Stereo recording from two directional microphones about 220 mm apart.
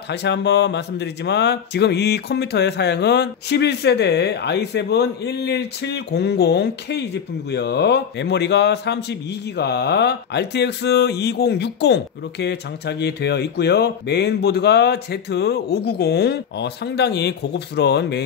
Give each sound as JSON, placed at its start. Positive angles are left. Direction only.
{"t": 0.1, "sound": "a man's voice", "side_deg": 50}